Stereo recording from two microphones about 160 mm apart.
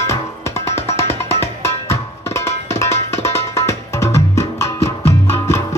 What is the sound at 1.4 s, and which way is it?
Tabla, 15° left (ahead or behind).